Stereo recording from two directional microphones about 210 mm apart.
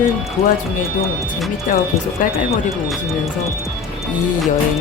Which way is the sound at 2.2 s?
40° left (ahead or behind).